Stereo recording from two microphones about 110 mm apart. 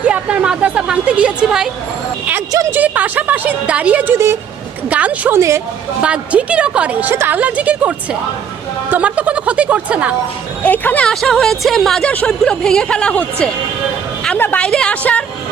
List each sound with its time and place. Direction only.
0.0 s speech: 10° right (ahead or behind)
2.5 s a woman's voice: 30° right (ahead or behind)
2.7 s a woman's voice: 15° right (ahead or behind)
5.4 s speech: 25° right (ahead or behind)
6.0 s a woman's voice: 10° right (ahead or behind)
10.6 s speech: 15° left (ahead or behind)